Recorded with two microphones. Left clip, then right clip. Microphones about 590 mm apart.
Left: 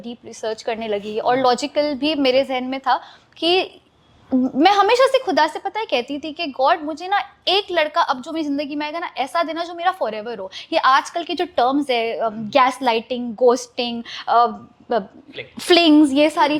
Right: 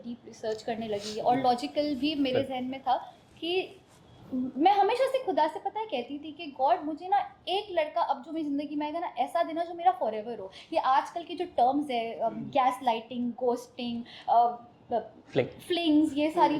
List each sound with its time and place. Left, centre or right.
0.0 s a woman's voice: left
15.6 s a woman's voice: left